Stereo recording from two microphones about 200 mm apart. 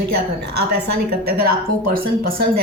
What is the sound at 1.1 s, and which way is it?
A woman's voice, 50° right (ahead or behind).